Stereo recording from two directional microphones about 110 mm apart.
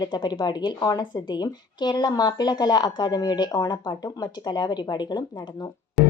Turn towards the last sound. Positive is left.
turn(degrees=0)  # may be behind; listen again after turning